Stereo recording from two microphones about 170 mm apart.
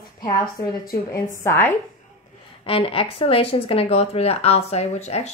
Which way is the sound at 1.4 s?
15° left (ahead or behind).